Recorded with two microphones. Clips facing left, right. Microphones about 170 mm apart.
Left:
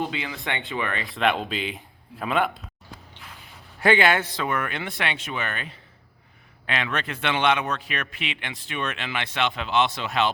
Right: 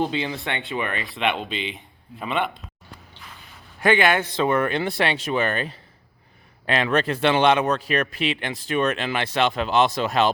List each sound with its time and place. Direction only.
0.0 s a man's voice: 30° right (ahead or behind)
0.4 s speech: 15° left (ahead or behind)
0.7 s speech: 20° right (ahead or behind)
1.0 s speech: centre (ahead or behind)
4.0 s a man's voice: 15° right (ahead or behind); by 10.2 s 40° right (ahead or behind)